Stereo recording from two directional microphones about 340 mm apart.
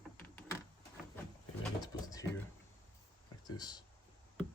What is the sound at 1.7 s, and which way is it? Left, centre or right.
Pigeon, centre.